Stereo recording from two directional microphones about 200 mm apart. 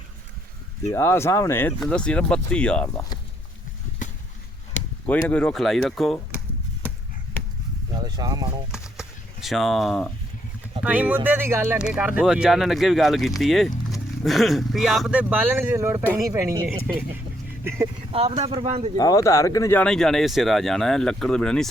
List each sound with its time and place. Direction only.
0.9 s speech: 15° left (ahead or behind)
5.0 s speech: 5° left (ahead or behind)
7.9 s speech: 20° right (ahead or behind)
8.7 s clip-clop: 5° right (ahead or behind)
10.8 s speech: 5° right (ahead or behind)
18.1 s speech: 30° right (ahead or behind)
18.9 s speech: 15° left (ahead or behind)